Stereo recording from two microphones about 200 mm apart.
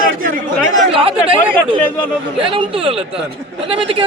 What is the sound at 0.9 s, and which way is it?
Speech, 25° right (ahead or behind).